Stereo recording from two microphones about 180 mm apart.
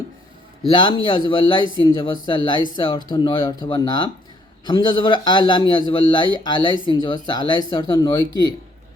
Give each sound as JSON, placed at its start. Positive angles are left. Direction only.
{"t": 0.8, "sound": "a man's voice", "side_deg": 25}